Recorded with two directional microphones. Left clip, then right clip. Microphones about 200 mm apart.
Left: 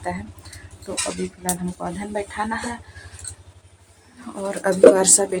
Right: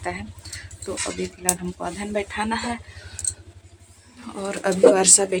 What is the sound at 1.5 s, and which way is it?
Speech, 5° right (ahead or behind).